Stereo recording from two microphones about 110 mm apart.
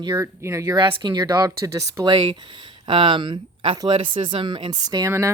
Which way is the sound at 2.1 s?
45° right (ahead or behind).